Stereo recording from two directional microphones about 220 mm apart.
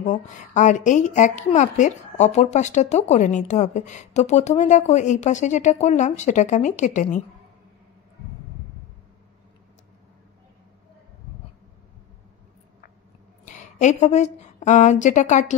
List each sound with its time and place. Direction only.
0.0 s a woman's voice: 35° left (ahead or behind)
13.5 s speech: 35° left (ahead or behind)